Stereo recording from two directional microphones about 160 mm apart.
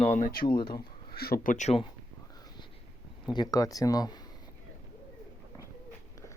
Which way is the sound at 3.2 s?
25° left (ahead or behind).